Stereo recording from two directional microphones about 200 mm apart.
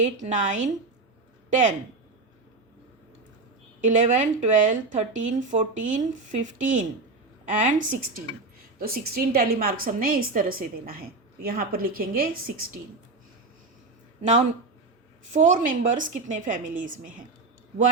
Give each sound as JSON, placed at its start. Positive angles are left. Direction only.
{"t": 0.0, "sound": "a woman's voice", "side_deg": -35}
{"t": 3.8, "sound": "a woman's voice", "side_deg": -40}
{"t": 14.2, "sound": "a woman's voice", "side_deg": -35}